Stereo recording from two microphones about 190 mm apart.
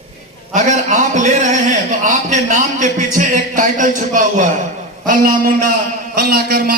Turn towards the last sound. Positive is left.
turn(degrees=-50)  # may be behind; listen again after turning